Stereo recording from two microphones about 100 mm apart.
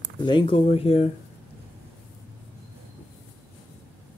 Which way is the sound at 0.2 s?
50° left (ahead or behind).